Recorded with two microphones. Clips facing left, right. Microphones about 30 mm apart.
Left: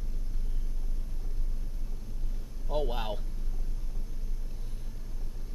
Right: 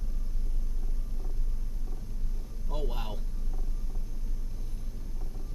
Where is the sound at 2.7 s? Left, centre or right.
Left.